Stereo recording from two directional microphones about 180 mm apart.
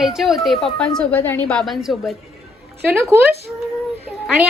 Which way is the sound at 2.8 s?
15° right (ahead or behind).